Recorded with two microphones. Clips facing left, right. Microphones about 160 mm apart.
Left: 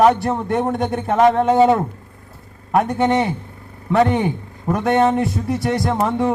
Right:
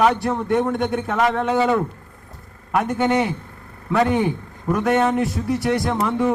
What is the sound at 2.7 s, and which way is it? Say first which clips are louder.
Speech: left 2 dB; 20° left (ahead or behind).